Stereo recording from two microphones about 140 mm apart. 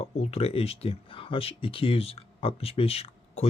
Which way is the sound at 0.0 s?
50° left (ahead or behind).